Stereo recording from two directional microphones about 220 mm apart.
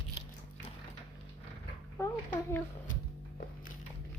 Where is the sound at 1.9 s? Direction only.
10° left (ahead or behind).